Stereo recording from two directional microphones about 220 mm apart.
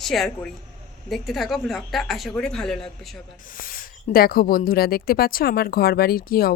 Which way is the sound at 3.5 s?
40° left (ahead or behind).